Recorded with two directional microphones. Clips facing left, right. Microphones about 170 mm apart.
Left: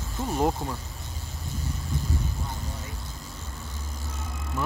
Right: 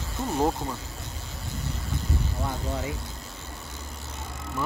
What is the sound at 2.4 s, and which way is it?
Vehicle, 70° right (ahead or behind).